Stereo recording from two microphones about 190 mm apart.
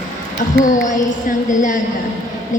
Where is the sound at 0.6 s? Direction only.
40° left (ahead or behind).